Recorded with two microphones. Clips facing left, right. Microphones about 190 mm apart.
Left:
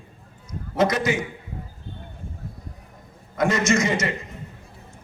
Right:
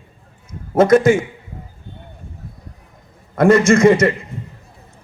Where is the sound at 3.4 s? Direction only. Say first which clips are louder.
Right 10 dB; 55° right (ahead or behind).